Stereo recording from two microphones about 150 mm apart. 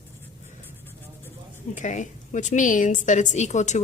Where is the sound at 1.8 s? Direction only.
55° left (ahead or behind).